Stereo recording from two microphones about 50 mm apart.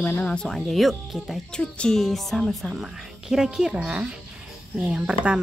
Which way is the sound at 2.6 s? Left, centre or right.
Centre.